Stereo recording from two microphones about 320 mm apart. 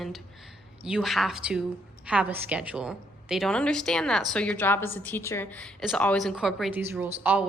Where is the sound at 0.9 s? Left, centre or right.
Centre.